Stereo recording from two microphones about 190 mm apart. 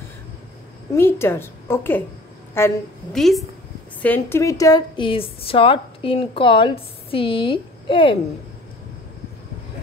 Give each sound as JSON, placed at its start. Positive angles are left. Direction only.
{"t": 0.9, "sound": "a woman's voice", "side_deg": 15}
{"t": 3.2, "sound": "a woman's voice", "side_deg": 0}